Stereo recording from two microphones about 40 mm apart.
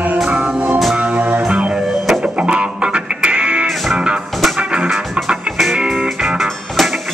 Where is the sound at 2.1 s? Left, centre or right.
Right.